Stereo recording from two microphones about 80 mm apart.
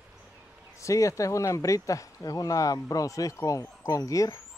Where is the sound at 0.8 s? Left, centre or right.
Left.